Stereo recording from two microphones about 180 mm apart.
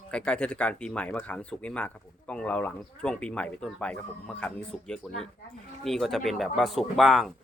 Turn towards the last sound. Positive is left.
turn(degrees=0)  # may be behind; listen again after turning